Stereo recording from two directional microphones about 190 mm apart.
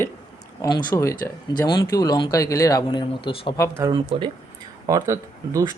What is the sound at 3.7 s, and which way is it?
Speech, 20° right (ahead or behind).